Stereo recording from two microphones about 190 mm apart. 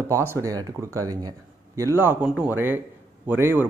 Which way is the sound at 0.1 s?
15° right (ahead or behind).